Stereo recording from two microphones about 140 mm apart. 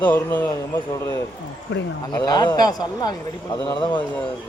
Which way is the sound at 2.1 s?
30° left (ahead or behind).